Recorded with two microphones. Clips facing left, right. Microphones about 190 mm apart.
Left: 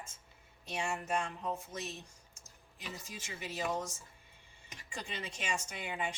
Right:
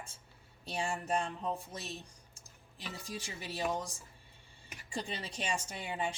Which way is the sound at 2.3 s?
35° right (ahead or behind).